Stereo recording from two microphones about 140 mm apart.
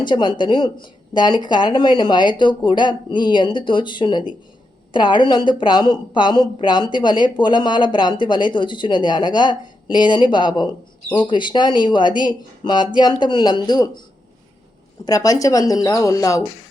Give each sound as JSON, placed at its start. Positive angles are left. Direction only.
{"t": 0.0, "sound": "a woman's voice", "side_deg": 35}
{"t": 15.0, "sound": "speech", "side_deg": 25}